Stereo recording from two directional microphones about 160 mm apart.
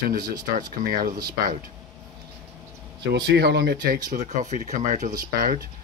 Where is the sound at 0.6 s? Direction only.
60° right (ahead or behind).